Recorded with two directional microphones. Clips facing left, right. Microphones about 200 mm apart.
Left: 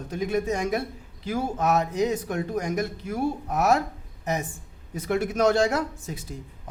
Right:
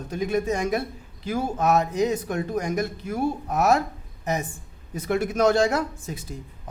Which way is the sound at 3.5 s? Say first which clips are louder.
Right 1 dB; 45° right (ahead or behind).